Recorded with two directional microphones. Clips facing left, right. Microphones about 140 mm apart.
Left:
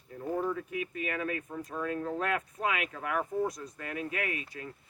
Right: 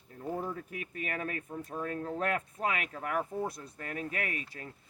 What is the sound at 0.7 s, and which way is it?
Speech, 40° right (ahead or behind).